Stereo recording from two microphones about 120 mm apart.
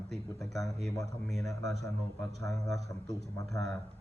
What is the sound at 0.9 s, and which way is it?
Speech, 30° left (ahead or behind).